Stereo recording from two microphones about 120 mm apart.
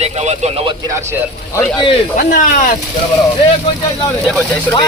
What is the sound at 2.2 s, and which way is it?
Speech, 90° left.